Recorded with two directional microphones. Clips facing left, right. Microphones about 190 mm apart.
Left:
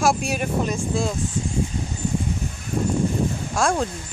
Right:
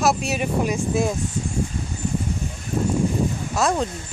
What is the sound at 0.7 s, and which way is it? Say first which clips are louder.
Speech: right 2 dB; 15° right (ahead or behind).